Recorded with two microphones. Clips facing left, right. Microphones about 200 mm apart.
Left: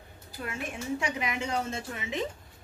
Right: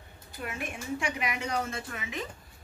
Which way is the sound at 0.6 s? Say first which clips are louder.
Left 2 dB; 25° left (ahead or behind).